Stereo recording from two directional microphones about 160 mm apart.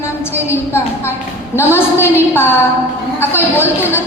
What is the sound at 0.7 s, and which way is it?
A woman's voice, 15° left (ahead or behind).